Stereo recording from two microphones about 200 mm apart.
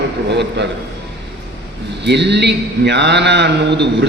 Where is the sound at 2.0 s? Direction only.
60° right (ahead or behind).